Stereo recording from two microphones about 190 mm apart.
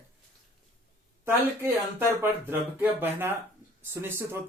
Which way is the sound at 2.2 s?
10° right (ahead or behind).